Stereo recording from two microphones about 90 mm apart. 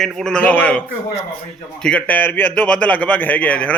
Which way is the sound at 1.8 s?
15° left (ahead or behind).